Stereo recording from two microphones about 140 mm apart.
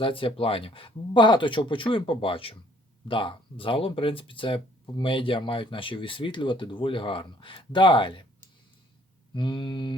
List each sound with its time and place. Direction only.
0.0 s speech: 40° left (ahead or behind)
9.3 s speech: 35° left (ahead or behind)